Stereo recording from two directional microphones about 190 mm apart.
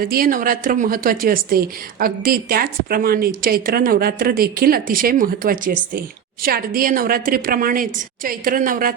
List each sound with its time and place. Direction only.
0.0 s speech: 50° right (ahead or behind)